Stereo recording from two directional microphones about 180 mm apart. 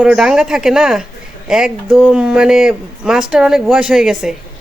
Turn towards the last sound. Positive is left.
turn(degrees=0)  # may be behind; listen again after turning